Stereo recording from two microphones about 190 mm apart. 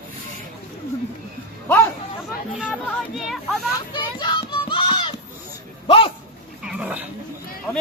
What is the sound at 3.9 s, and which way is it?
Music, 25° left (ahead or behind).